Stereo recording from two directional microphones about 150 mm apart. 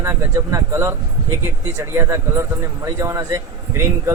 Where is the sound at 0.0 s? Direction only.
20° right (ahead or behind).